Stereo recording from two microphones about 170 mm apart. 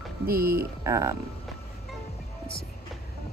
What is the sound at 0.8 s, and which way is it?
Speech, 20° right (ahead or behind).